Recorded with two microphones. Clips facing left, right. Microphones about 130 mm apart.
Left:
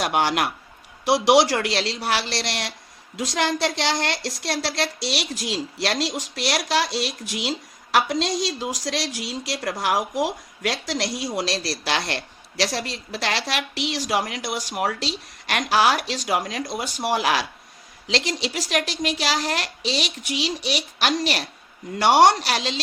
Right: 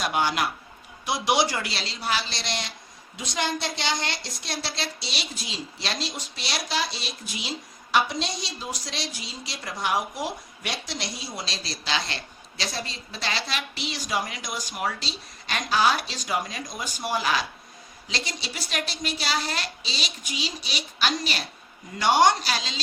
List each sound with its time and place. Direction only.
0.0 s a child's voice: 70° left (ahead or behind)
3.2 s a woman's voice: 90° left; by 17.4 s 70° left (ahead or behind)
18.1 s a child's voice: 90° left; by 22.8 s 65° left (ahead or behind)